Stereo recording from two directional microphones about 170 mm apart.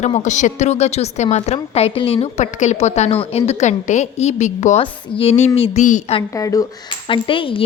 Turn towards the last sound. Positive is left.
turn(degrees=30)  # may be behind; listen again after turning